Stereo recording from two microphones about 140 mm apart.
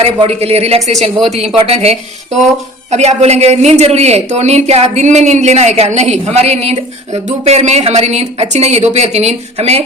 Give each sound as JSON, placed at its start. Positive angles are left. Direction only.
{"t": 0.0, "sound": "a woman's voice", "side_deg": -45}